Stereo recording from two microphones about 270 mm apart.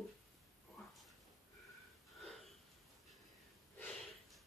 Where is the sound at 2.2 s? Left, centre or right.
Centre.